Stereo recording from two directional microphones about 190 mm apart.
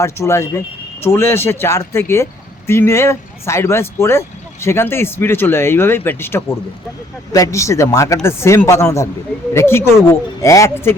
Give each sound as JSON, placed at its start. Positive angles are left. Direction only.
{"t": 0.0, "sound": "speech", "side_deg": 15}